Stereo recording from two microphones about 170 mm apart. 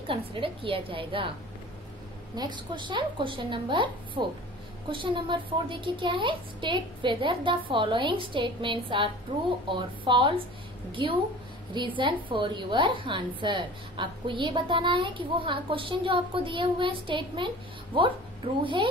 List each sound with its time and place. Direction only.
0.0 s a woman's voice: 35° right (ahead or behind)
2.3 s a woman's voice: 25° right (ahead or behind)
18.6 s a woman's voice: 30° right (ahead or behind)